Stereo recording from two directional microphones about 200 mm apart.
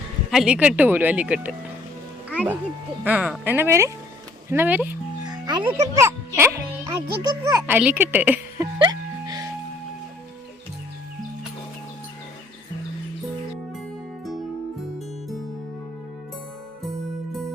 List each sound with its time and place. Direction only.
0.3 s speech: 5° right (ahead or behind)
3.0 s speech: 10° right (ahead or behind)
5.2 s a child's voice: 20° right (ahead or behind)
8.8 s music: 20° right (ahead or behind)